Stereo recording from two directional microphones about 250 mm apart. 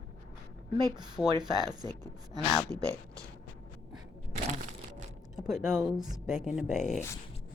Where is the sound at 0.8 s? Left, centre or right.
Centre.